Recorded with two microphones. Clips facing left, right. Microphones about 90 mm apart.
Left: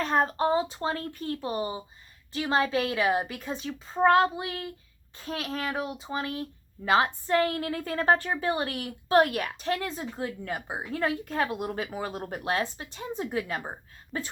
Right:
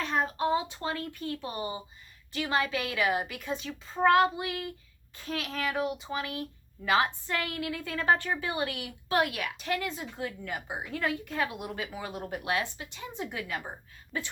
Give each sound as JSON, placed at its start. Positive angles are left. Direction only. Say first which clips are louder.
{"t": 0.0, "sound": "a woman's voice", "louder": "left 4 dB", "side_deg": 40}